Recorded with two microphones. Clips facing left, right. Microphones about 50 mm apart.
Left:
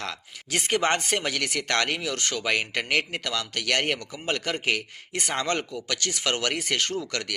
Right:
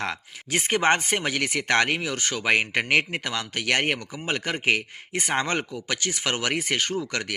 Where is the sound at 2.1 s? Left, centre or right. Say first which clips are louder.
Right 1 dB; centre.